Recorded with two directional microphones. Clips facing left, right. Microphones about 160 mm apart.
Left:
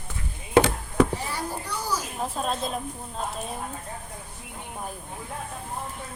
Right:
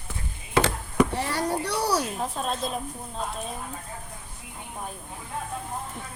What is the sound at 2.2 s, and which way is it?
Speech, centre (ahead or behind).